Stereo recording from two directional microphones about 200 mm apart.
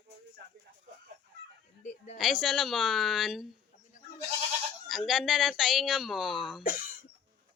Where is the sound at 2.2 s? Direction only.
Centre (ahead or behind).